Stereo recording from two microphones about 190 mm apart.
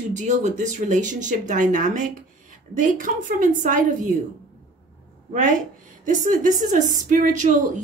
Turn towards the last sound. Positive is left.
turn(degrees=-40)  # may be behind; listen again after turning